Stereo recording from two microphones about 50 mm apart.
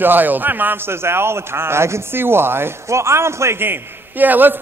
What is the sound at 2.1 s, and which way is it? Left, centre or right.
Speech, right.